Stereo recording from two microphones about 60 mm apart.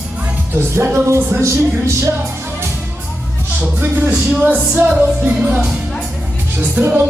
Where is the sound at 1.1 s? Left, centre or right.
Right.